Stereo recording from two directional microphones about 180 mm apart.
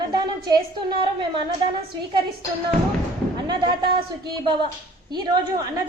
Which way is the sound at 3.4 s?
25° right (ahead or behind).